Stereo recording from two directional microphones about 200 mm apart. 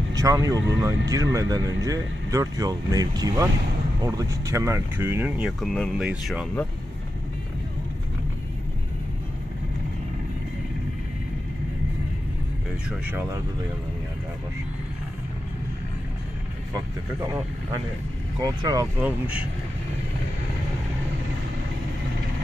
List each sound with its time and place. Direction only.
0.1 s speech: 15° right (ahead or behind); by 6.6 s centre (ahead or behind)
13.0 s speech: 10° right (ahead or behind)
18.4 s speech: 20° right (ahead or behind)